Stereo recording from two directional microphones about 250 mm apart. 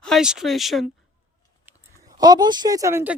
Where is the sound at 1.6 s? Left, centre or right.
Centre.